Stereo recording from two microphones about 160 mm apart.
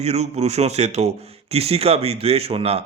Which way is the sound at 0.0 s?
40° right (ahead or behind).